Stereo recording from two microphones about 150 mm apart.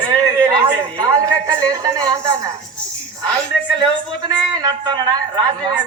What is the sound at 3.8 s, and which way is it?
A man's voice, 25° right (ahead or behind).